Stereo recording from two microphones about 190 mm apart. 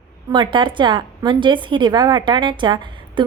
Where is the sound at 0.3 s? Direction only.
25° right (ahead or behind).